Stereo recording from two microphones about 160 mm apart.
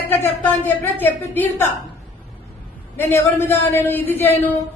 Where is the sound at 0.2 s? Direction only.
15° left (ahead or behind).